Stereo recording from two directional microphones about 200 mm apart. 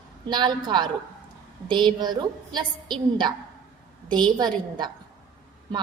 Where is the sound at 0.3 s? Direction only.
20° right (ahead or behind).